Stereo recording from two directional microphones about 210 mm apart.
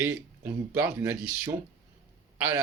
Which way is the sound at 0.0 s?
5° right (ahead or behind).